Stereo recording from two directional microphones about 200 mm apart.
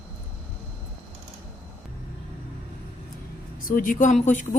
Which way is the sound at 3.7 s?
45° left (ahead or behind).